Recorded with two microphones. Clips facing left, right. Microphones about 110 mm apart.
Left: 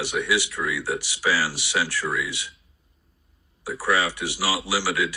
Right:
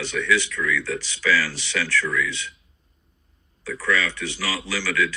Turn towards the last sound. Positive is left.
turn(degrees=15)  # may be behind; listen again after turning